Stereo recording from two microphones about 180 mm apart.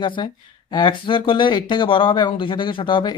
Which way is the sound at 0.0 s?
25° left (ahead or behind).